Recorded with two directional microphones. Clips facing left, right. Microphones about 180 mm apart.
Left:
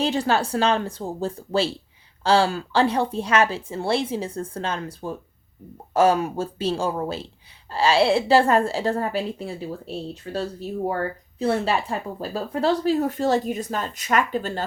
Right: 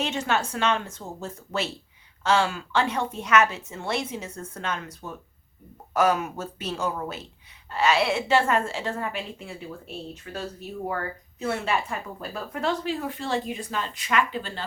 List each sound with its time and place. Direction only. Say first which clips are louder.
0.0 s speech: left 5 dB; 35° left (ahead or behind)